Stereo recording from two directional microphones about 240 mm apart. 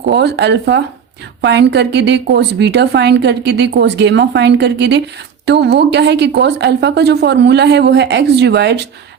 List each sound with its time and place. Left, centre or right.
0.0 s a woman's voice: right